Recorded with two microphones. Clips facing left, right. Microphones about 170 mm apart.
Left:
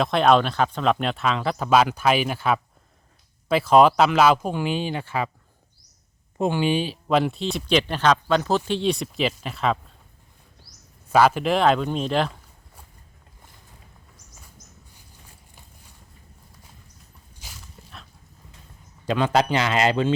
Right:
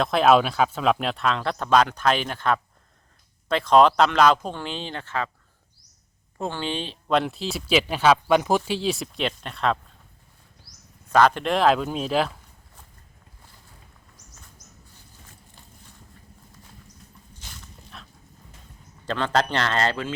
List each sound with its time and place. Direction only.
0.0 s speech: centre (ahead or behind)
6.4 s speech: 10° left (ahead or behind)
11.1 s speech: 5° left (ahead or behind)
17.4 s dog: 5° left (ahead or behind)
19.0 s speech: 10° left (ahead or behind)